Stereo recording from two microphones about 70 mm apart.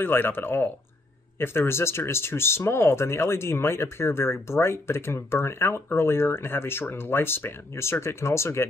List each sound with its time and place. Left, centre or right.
0.0 s speech: left